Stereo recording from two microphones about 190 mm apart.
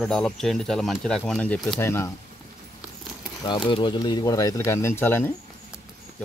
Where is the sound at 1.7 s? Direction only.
15° left (ahead or behind).